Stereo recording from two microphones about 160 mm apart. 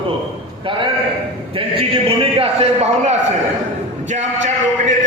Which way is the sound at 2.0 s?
35° right (ahead or behind).